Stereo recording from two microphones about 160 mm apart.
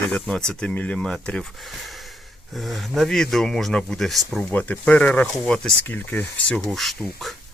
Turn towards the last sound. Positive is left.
turn(degrees=0)  # may be behind; listen again after turning